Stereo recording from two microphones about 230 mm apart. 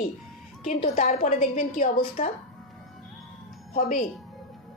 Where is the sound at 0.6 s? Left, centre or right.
Left.